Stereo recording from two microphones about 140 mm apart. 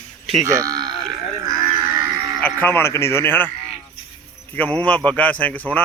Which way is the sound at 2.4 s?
15° left (ahead or behind).